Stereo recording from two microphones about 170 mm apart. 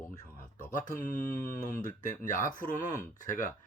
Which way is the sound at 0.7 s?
50° left (ahead or behind).